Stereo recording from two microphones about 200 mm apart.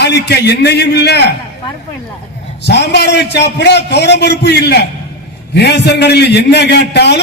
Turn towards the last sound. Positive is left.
turn(degrees=55)  # may be behind; listen again after turning